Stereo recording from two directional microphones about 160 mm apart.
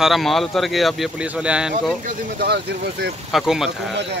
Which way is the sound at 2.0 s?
80° right.